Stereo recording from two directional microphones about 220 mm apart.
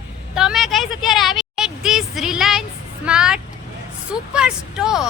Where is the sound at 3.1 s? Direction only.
5° right (ahead or behind).